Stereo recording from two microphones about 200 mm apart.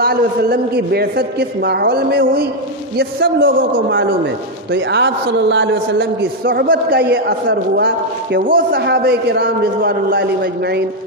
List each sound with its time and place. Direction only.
0.0 s a man's voice: 50° right (ahead or behind); by 6.0 s 65° right (ahead or behind)
6.4 s a man's voice: 50° right (ahead or behind)